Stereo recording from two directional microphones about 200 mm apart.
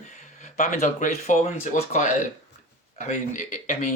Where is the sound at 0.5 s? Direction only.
35° left (ahead or behind).